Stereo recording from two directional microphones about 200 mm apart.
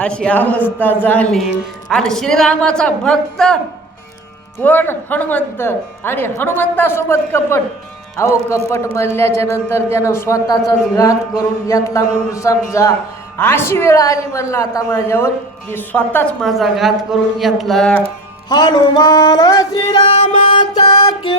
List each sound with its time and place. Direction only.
0.0 s a woman's voice: 5° left (ahead or behind)
4.6 s speech: 10° left (ahead or behind)
11.7 s a woman's voice: 15° left (ahead or behind)
18.4 s music: 20° left (ahead or behind)